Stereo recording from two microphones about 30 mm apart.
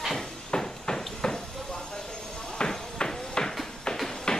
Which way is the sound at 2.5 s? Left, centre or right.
Left.